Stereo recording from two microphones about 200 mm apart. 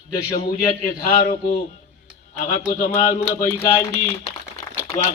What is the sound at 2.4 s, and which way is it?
Speech, 40° left (ahead or behind).